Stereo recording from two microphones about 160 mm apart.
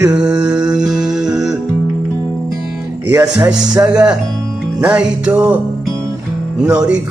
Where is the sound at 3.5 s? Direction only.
5° right (ahead or behind).